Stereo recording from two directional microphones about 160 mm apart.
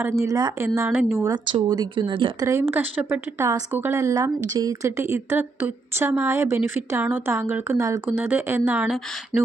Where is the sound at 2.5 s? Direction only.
15° right (ahead or behind).